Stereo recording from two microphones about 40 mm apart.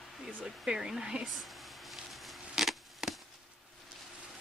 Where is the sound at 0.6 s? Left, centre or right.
Right.